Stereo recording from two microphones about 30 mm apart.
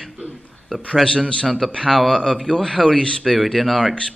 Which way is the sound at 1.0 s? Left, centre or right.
Centre.